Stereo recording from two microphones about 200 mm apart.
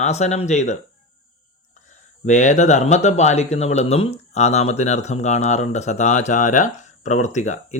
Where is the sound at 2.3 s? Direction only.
35° left (ahead or behind).